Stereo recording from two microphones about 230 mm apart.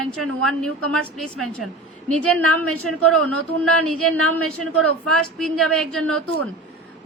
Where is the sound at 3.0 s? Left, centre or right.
Right.